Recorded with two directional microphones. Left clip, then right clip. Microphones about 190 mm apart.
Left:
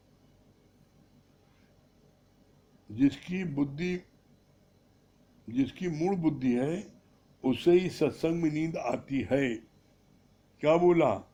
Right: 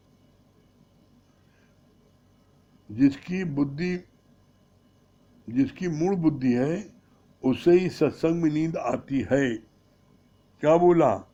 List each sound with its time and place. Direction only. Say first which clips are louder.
2.9 s speech: right 5 dB; 30° right (ahead or behind)
5.5 s speech: right 5 dB; 30° right (ahead or behind)
10.6 s speech: right 5 dB; 25° right (ahead or behind)